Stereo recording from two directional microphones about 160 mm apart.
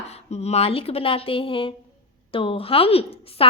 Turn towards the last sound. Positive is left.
turn(degrees=35)  # may be behind; listen again after turning